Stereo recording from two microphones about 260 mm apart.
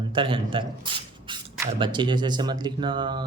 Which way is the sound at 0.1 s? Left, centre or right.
Centre.